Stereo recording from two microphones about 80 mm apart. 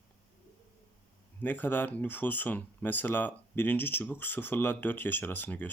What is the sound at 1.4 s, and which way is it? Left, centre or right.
Speech, left.